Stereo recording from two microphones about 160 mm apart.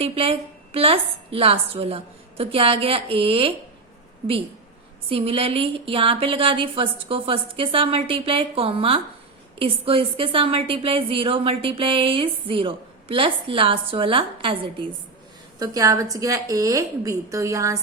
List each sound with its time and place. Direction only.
0.0 s a woman's voice: 35° right (ahead or behind)
5.0 s a woman's voice: 35° right (ahead or behind)
15.5 s a woman's voice: 20° right (ahead or behind)